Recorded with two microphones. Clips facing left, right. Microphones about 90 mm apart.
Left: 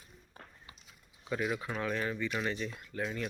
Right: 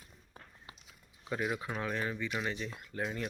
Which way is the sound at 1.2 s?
15° right (ahead or behind).